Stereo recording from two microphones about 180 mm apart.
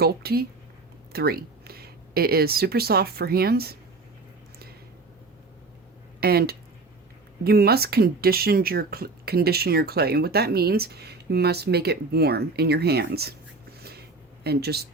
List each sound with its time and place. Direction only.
0.0 s speech: 60° right (ahead or behind)
6.1 s speech: 60° right (ahead or behind)
14.4 s speech: 60° right (ahead or behind)